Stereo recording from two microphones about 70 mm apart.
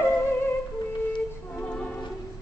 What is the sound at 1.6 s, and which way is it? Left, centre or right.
Music, centre.